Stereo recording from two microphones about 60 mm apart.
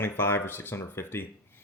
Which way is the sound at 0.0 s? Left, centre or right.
Left.